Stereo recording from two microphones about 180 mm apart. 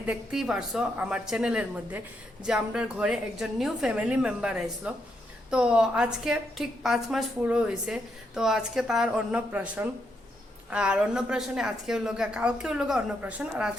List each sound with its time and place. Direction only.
0.0 s a woman's voice: 5° right (ahead or behind)